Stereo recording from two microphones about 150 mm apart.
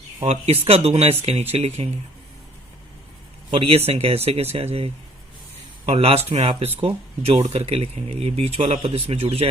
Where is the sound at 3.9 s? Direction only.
40° right (ahead or behind).